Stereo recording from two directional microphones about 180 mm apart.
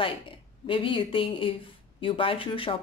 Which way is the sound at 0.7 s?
30° left (ahead or behind).